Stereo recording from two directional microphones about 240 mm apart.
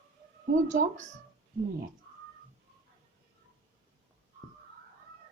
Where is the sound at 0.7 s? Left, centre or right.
Right.